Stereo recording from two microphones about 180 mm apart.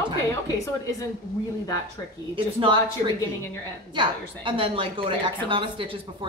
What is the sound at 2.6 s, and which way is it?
A woman's voice, 25° right (ahead or behind).